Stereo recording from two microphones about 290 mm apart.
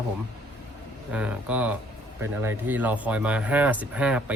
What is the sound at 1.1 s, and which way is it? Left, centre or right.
Speech, centre.